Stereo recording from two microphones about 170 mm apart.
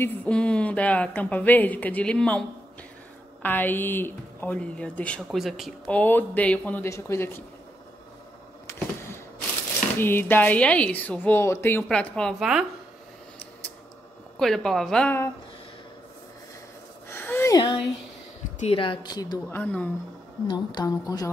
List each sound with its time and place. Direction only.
0.0 s speech: 10° left (ahead or behind)
3.4 s speech: 10° left (ahead or behind)
8.7 s a sound: 15° left (ahead or behind)
9.9 s speech: 10° left (ahead or behind)
14.4 s speech: centre (ahead or behind)
17.1 s a sound: 15° left (ahead or behind)
18.6 s a woman's voice: 35° left (ahead or behind)
19.5 s speech: 10° left (ahead or behind)
20.4 s a woman's voice: 25° left (ahead or behind)